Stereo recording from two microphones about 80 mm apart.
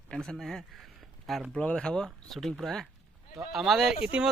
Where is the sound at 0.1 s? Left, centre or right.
Centre.